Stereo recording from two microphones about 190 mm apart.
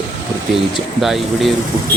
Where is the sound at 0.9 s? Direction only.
Centre (ahead or behind).